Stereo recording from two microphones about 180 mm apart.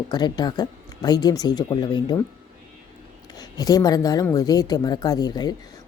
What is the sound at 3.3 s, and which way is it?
Speech, 20° left (ahead or behind).